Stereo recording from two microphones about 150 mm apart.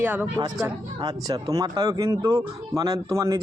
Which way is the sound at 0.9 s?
25° right (ahead or behind).